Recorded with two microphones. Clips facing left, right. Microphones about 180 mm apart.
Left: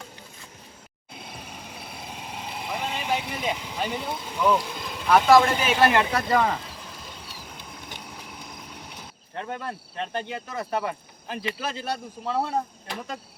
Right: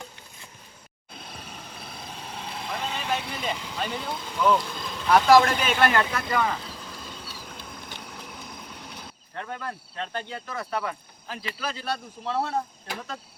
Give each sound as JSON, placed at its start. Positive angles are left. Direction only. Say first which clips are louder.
{"t": 1.7, "sound": "vehicle", "louder": "left 2 dB", "side_deg": 10}
{"t": 5.0, "sound": "speech", "louder": "even", "side_deg": 0}
{"t": 6.1, "sound": "speech", "louder": "left 4 dB", "side_deg": 35}
{"t": 7.3, "sound": "a sound", "louder": "right 1 dB", "side_deg": 15}
{"t": 9.3, "sound": "speech", "louder": "left 2 dB", "side_deg": 20}
{"t": 12.2, "sound": "speech", "louder": "left 1 dB", "side_deg": 10}